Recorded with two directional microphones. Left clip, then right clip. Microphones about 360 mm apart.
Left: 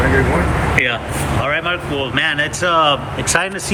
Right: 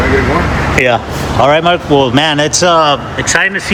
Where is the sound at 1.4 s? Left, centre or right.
Centre.